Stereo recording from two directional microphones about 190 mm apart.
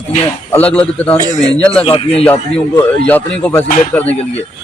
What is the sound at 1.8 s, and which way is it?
Speech, 30° left (ahead or behind).